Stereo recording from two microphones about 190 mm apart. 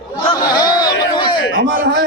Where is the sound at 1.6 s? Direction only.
65° right (ahead or behind).